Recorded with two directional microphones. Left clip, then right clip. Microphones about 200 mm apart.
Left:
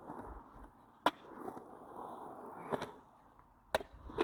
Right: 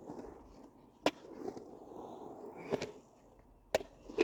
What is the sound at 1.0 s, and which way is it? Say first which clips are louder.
Skateboard: left 1 dB; 30° right (ahead or behind).